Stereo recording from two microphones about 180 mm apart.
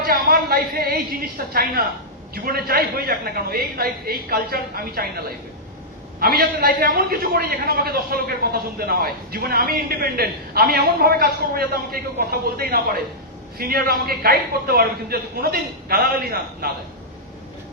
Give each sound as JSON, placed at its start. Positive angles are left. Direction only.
{"t": 0.0, "sound": "a man's voice", "side_deg": -55}